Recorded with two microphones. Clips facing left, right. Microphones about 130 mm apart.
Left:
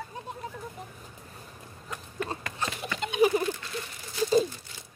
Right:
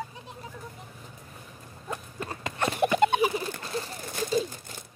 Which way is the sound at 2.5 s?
60° right (ahead or behind).